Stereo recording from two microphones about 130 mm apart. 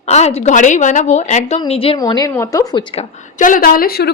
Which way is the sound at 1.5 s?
45° left (ahead or behind).